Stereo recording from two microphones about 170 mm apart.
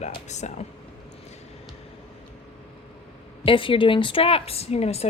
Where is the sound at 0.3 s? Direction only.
45° left (ahead or behind).